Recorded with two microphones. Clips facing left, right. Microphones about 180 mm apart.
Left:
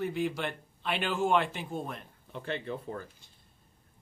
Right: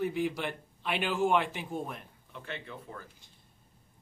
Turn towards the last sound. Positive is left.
turn(degrees=35)  # may be behind; listen again after turning